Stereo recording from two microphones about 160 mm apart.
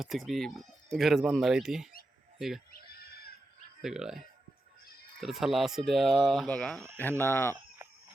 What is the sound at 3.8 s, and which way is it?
Speech, 5° right (ahead or behind).